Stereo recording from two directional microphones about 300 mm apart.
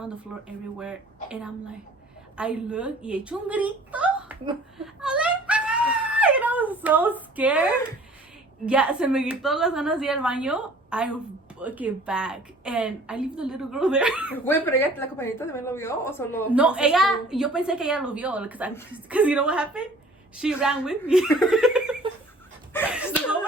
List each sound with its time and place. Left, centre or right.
0.3 s a woman's voice: centre
4.9 s wail: centre
8.6 s a woman's voice: centre
16.5 s a woman's voice: centre
22.8 s slap: centre